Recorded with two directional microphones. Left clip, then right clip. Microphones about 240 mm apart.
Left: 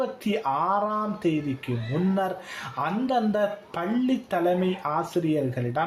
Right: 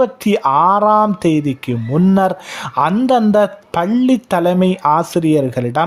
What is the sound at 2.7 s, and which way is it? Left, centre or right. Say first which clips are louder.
Speech: right 12 dB; right.